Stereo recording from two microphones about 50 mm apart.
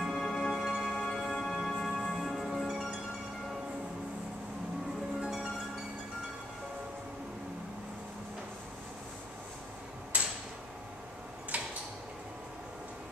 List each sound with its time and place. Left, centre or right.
0.0 s music: centre
5.2 s music: centre
10.1 s a sound: right
11.5 s tick-tock: right